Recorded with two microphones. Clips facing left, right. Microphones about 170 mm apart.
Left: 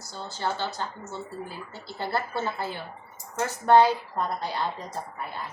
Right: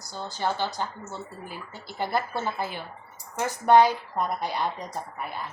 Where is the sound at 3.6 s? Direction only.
15° right (ahead or behind).